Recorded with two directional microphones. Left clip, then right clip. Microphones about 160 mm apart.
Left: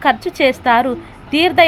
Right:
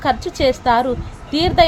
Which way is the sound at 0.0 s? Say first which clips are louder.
Left 3 dB; 20° left (ahead or behind).